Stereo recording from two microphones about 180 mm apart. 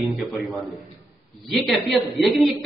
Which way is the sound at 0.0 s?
Centre (ahead or behind).